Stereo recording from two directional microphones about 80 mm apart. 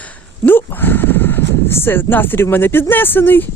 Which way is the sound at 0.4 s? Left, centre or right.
Left.